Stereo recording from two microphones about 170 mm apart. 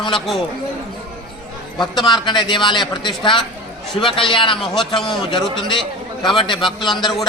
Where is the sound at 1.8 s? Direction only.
25° left (ahead or behind).